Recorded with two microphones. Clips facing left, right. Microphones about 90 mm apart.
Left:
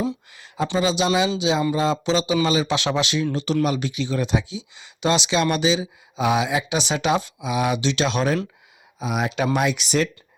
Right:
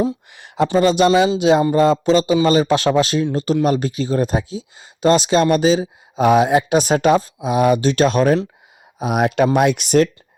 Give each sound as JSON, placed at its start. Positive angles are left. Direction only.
{"t": 0.3, "sound": "speech", "side_deg": -65}